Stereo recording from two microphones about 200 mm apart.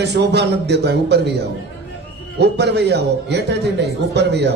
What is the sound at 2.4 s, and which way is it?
A man's voice, 60° right (ahead or behind).